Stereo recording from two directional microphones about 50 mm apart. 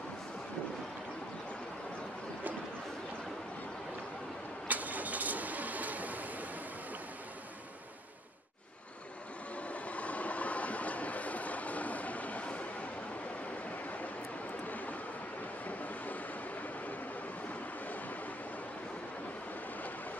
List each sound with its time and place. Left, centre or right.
4.6 s printer: right
9.6 s train: left